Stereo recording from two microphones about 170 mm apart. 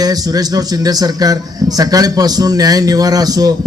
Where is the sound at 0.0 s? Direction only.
20° right (ahead or behind).